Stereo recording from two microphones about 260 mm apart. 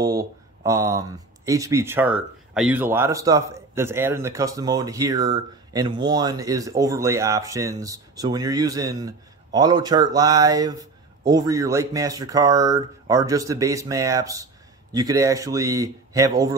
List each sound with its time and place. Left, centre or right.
0.0 s speech: centre